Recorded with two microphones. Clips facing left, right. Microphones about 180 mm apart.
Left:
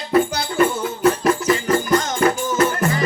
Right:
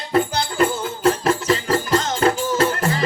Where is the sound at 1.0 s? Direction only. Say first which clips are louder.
Left 1 dB; 30° right (ahead or behind).